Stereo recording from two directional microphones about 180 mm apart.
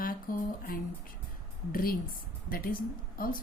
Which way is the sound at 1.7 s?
50° left (ahead or behind).